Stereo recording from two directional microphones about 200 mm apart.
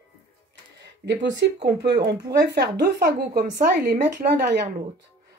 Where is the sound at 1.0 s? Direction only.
60° right (ahead or behind).